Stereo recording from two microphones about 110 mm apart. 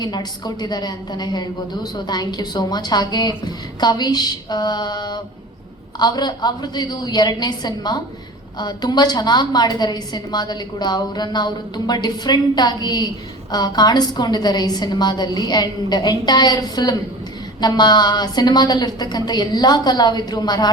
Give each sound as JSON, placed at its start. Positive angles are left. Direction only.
{"t": 0.0, "sound": "a woman's voice", "side_deg": 40}